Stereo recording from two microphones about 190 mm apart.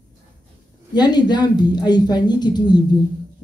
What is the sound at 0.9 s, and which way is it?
Speech, 20° left (ahead or behind).